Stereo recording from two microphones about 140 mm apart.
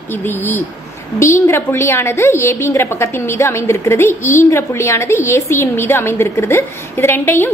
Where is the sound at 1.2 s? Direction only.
20° left (ahead or behind).